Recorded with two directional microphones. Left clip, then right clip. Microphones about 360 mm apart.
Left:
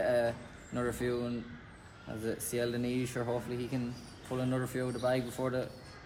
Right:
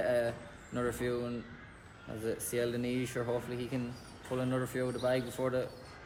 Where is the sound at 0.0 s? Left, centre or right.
Centre.